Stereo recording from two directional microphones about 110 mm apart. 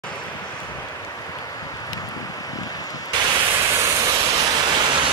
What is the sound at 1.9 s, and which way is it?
Vehicle, 35° left (ahead or behind).